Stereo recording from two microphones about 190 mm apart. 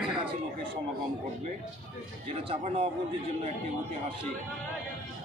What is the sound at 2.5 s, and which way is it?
Speech, 30° right (ahead or behind).